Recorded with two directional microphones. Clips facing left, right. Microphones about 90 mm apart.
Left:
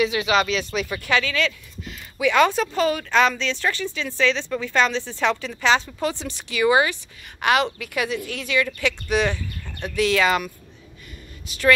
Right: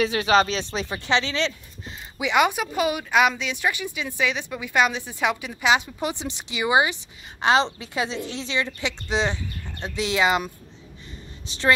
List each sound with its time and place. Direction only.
0.0 s a woman's voice: 35° right (ahead or behind)